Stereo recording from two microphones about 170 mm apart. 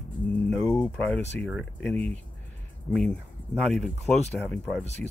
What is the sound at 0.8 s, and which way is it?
Speech, 5° left (ahead or behind).